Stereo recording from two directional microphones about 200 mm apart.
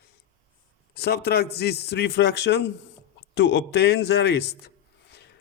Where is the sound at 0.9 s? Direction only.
55° left (ahead or behind).